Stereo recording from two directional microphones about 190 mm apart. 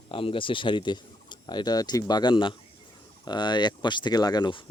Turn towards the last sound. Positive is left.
turn(degrees=25)  # may be behind; listen again after turning